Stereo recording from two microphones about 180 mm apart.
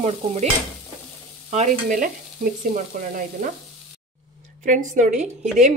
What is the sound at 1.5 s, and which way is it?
Speech, 40° right (ahead or behind).